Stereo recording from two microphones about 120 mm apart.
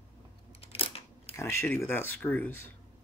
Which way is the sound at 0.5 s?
55° left (ahead or behind).